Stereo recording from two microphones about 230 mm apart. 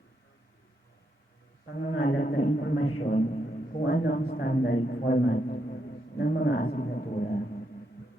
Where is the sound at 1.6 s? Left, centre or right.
Left.